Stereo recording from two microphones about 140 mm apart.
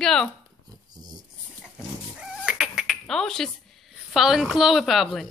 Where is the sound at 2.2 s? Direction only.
5° right (ahead or behind).